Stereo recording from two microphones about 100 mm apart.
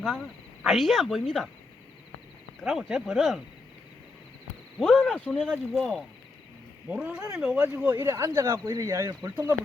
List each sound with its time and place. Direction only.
0.6 s speech: centre (ahead or behind)
2.6 s speech: 5° right (ahead or behind)
4.8 s speech: 5° left (ahead or behind)
6.8 s speech: 10° right (ahead or behind)
8.0 s speech: 30° right (ahead or behind)